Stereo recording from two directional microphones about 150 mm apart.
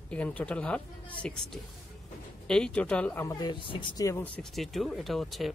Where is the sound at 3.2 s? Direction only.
25° left (ahead or behind).